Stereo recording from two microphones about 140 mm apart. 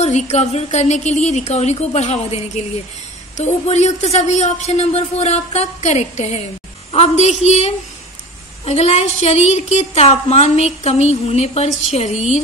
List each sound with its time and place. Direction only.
0.0 s a woman's voice: 50° left (ahead or behind)